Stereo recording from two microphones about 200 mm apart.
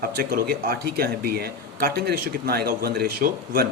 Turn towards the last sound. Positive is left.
turn(degrees=-50)  # may be behind; listen again after turning